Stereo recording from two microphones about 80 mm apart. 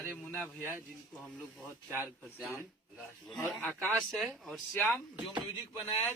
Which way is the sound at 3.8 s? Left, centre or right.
Centre.